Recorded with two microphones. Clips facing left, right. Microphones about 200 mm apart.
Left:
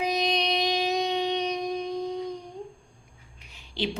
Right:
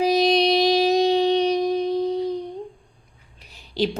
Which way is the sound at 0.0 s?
35° right (ahead or behind).